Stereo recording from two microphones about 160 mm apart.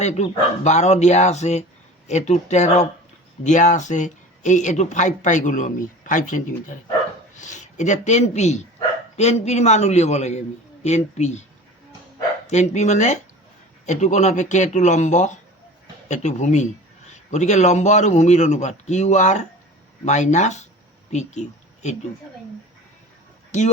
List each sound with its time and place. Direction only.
0.0 s speech: 45° left (ahead or behind)
12.5 s speech: 45° left (ahead or behind)